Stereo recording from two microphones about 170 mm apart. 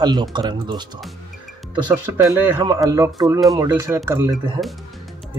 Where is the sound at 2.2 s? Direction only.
15° right (ahead or behind).